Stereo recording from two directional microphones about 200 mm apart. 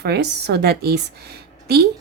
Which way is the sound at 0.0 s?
55° right (ahead or behind).